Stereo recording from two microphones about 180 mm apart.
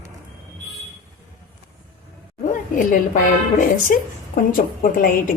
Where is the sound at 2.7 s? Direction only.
45° left (ahead or behind).